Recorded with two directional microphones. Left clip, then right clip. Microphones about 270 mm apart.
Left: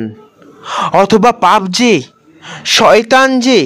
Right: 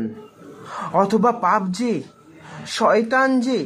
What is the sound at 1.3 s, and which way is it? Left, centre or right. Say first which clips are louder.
Speech: left 10 dB; left.